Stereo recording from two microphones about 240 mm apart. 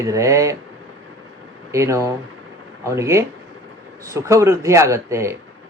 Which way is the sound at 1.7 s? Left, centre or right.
Centre.